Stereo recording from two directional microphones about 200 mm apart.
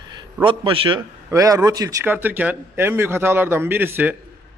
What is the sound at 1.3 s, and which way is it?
Speech, 15° right (ahead or behind).